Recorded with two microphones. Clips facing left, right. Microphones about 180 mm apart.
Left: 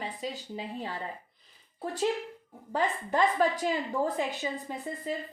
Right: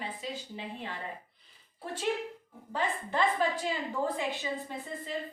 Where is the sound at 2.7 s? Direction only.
45° left (ahead or behind).